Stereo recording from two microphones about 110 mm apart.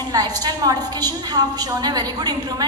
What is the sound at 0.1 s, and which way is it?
A woman's voice, 35° right (ahead or behind).